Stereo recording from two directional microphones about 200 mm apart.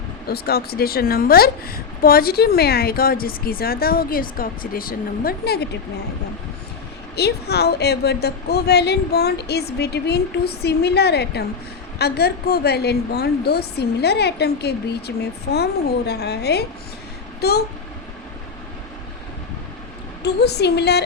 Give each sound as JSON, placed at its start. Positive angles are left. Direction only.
{"t": 0.3, "sound": "a woman's voice", "side_deg": 50}
{"t": 7.2, "sound": "a woman's voice", "side_deg": 55}
{"t": 20.2, "sound": "a woman's voice", "side_deg": 55}